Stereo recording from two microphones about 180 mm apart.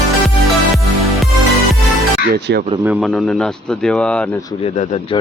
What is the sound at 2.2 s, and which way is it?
Speech, 70° right (ahead or behind).